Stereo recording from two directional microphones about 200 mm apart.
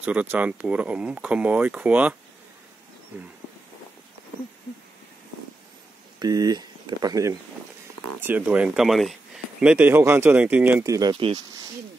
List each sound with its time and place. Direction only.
0.0 s speech: 5° right (ahead or behind)
6.1 s speech: 20° right (ahead or behind)